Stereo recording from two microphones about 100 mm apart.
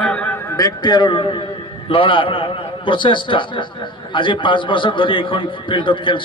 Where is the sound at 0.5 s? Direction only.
40° left (ahead or behind).